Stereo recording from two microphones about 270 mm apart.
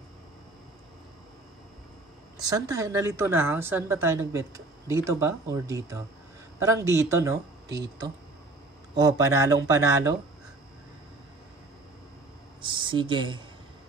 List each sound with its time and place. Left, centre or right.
2.3 s a woman's voice: centre
8.9 s a woman's voice: centre
12.8 s a woman's voice: centre